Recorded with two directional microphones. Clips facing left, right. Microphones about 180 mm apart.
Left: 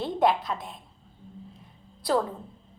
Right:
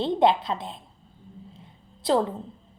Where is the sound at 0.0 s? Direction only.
25° right (ahead or behind).